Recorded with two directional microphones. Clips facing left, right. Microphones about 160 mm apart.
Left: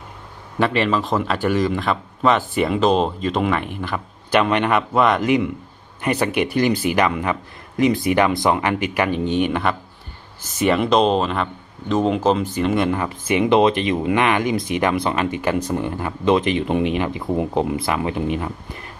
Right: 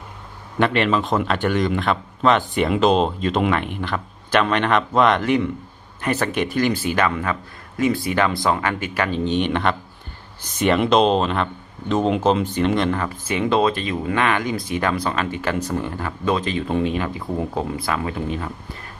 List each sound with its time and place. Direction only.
0.6 s speech: centre (ahead or behind); by 18.5 s 15° left (ahead or behind)